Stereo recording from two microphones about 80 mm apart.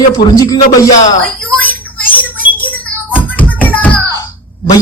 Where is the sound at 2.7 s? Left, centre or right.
Left.